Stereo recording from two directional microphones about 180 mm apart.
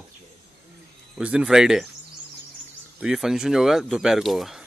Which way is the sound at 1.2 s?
5° right (ahead or behind).